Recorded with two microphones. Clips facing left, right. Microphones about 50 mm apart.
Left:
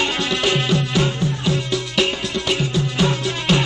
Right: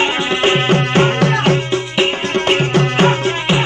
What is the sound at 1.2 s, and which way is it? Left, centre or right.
Music, right.